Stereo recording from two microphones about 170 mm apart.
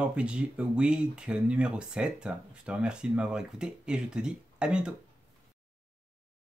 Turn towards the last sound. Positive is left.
turn(degrees=-5)  # may be behind; listen again after turning